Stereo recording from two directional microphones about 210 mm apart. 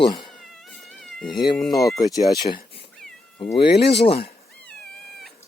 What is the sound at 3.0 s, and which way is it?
Cat, 5° left (ahead or behind).